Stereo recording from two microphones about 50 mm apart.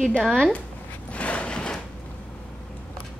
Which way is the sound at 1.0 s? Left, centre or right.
Left.